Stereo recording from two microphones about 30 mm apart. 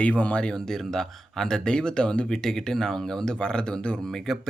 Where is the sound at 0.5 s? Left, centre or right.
Centre.